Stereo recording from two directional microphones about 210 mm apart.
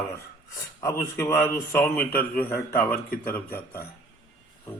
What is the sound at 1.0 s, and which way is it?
A man's voice, 10° left (ahead or behind).